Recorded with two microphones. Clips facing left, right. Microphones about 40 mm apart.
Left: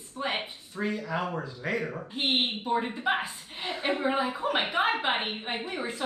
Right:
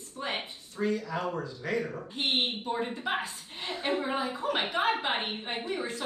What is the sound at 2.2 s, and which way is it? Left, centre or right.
A woman's voice, centre.